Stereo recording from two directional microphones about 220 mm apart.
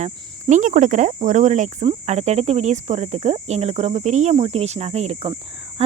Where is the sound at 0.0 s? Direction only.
35° right (ahead or behind).